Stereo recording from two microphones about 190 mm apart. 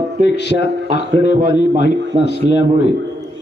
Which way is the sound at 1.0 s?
65° left (ahead or behind).